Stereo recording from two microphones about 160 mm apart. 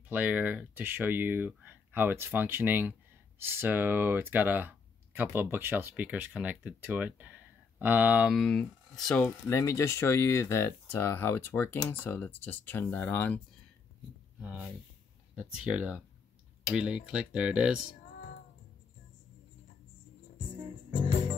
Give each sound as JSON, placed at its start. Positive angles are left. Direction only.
{"t": 0.1, "sound": "speech", "side_deg": -10}
{"t": 9.2, "sound": "speech", "side_deg": 20}
{"t": 14.4, "sound": "speech", "side_deg": -5}
{"t": 18.1, "sound": "music", "side_deg": 65}